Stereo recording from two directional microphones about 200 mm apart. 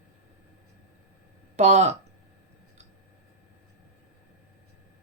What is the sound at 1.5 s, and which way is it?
Speech, 35° right (ahead or behind).